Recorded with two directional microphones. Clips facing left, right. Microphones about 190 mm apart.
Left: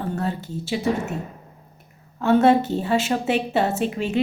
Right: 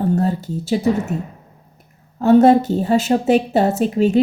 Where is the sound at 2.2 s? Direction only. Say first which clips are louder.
Right 5 dB; 40° right (ahead or behind).